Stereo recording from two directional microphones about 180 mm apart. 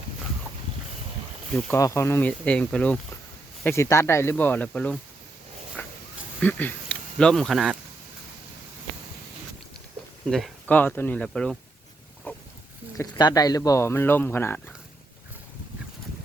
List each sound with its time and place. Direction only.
1.7 s speech: 15° left (ahead or behind)
5.8 s a sound: 10° left (ahead or behind)
6.4 s speech: 10° left (ahead or behind)
10.2 s speech: 5° left (ahead or behind)
12.3 s wild animals: 10° left (ahead or behind)
13.0 s speech: 20° left (ahead or behind)